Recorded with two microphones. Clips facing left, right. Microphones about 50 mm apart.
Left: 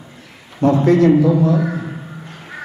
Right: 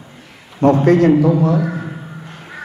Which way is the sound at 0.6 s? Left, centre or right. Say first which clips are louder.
Right 1 dB; right.